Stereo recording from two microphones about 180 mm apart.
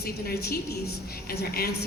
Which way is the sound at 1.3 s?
60° left (ahead or behind).